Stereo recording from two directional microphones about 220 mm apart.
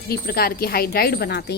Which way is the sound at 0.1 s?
45° left (ahead or behind).